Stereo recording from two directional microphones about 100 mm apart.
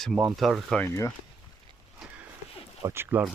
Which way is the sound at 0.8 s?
25° left (ahead or behind).